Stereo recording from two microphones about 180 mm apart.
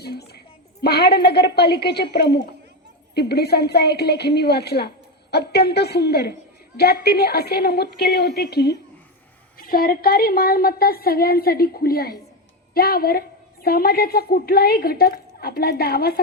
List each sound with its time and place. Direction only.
0.0 s a woman's voice: 65° left (ahead or behind)
9.6 s a woman's voice: 55° left (ahead or behind)